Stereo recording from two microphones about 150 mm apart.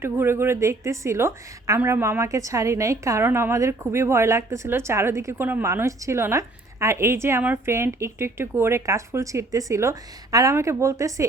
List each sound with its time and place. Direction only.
0.0 s a woman's voice: 15° right (ahead or behind)